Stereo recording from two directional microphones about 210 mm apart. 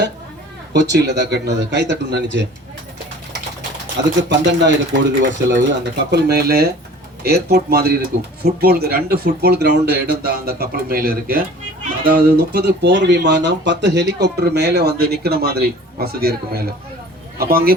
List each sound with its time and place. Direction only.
0.7 s speech: 55° right (ahead or behind)
4.2 s speech: 60° right (ahead or behind)